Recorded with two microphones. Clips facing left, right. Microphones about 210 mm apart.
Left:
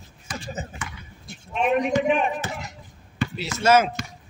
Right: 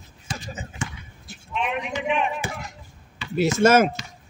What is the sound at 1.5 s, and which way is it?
Speech, 45° left (ahead or behind).